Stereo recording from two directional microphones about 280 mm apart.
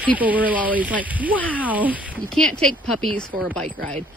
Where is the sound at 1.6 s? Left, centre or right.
Centre.